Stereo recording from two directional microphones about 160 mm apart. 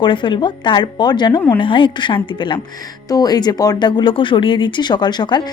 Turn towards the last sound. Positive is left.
turn(degrees=25)  # may be behind; listen again after turning